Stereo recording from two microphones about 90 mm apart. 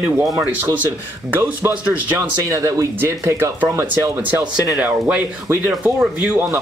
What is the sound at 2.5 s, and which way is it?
Speech, 35° right (ahead or behind).